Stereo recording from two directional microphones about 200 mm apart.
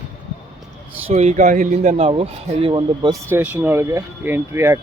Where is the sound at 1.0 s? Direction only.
35° right (ahead or behind).